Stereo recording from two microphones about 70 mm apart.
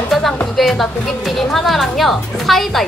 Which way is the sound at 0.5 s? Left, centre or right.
Centre.